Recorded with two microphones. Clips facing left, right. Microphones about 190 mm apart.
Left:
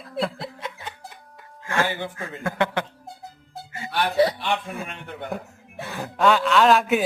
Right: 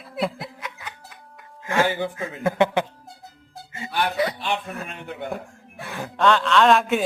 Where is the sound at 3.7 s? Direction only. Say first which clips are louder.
Right 1 dB; 25° right (ahead or behind).